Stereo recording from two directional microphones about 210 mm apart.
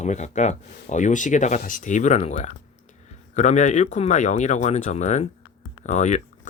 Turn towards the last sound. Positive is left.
turn(degrees=35)  # may be behind; listen again after turning